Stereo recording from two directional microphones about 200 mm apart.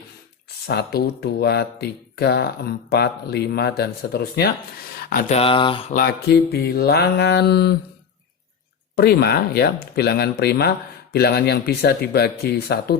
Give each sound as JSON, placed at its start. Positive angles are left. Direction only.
{"t": 0.7, "sound": "speech", "side_deg": 55}
{"t": 4.9, "sound": "a sound", "side_deg": 50}
{"t": 5.3, "sound": "speech", "side_deg": 30}
{"t": 5.9, "sound": "speech", "side_deg": 50}
{"t": 9.0, "sound": "speech", "side_deg": 50}